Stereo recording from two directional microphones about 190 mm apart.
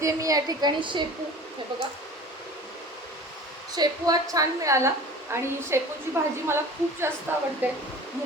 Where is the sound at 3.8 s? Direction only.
20° right (ahead or behind).